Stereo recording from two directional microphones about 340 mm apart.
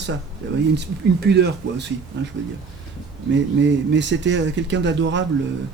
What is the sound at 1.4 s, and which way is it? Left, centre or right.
Speech, right.